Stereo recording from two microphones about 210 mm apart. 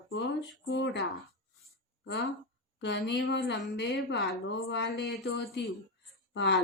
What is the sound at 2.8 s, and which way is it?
A woman's voice, 55° left (ahead or behind).